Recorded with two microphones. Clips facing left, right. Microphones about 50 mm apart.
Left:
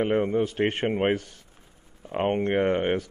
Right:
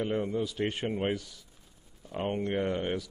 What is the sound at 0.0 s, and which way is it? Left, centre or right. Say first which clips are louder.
A man's voice: left 7 dB; left.